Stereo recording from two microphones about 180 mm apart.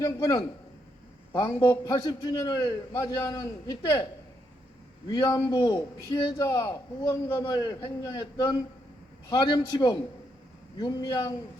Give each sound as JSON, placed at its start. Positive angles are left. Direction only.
{"t": 0.0, "sound": "a man's voice", "side_deg": 20}
{"t": 5.0, "sound": "a man's voice", "side_deg": 20}